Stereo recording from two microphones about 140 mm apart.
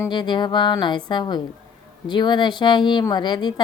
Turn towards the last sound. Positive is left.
turn(degrees=30)  # may be behind; listen again after turning